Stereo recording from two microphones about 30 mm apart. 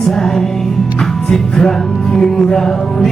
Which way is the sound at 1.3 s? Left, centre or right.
Left.